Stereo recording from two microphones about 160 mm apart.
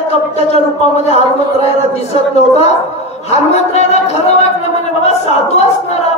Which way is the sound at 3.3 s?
40° left (ahead or behind).